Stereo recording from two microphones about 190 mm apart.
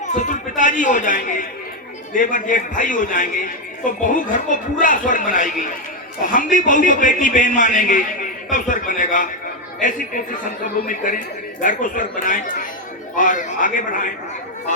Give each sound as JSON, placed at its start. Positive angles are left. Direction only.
{"t": 0.0, "sound": "chatter", "side_deg": 40}
{"t": 2.1, "sound": "a man's voice", "side_deg": 45}